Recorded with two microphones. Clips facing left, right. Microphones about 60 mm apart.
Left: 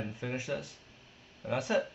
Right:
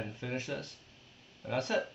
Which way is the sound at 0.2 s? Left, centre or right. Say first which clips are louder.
Left 2 dB; centre.